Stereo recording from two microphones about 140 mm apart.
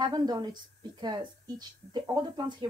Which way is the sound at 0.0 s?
30° right (ahead or behind).